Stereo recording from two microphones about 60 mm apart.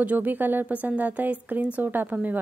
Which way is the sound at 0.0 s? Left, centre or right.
Right.